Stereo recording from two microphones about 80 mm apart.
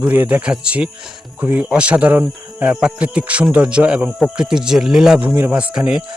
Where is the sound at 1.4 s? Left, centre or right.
Right; by 5.2 s centre.